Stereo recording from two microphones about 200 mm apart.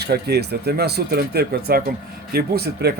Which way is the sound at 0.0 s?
55° right (ahead or behind).